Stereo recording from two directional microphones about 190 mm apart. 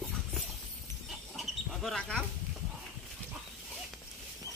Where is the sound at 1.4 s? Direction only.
Centre (ahead or behind).